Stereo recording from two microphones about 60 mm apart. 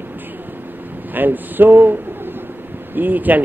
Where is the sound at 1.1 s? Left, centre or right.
Right.